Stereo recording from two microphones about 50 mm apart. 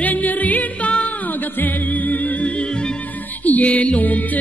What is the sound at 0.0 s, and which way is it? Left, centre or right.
Music, left.